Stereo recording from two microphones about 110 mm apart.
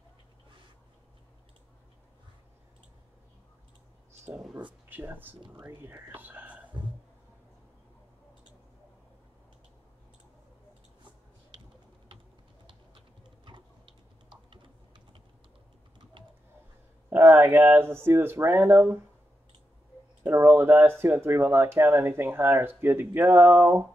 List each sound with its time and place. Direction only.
4.8 s speech: 20° right (ahead or behind)
13.5 s typing: 50° right (ahead or behind)
16.2 s a sound: 45° right (ahead or behind)
17.1 s speech: 20° right (ahead or behind)
20.2 s speech: 20° right (ahead or behind)
23.5 s a sound: 15° right (ahead or behind)